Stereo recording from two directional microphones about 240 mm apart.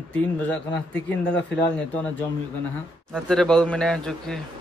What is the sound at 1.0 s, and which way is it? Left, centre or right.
Speech, centre.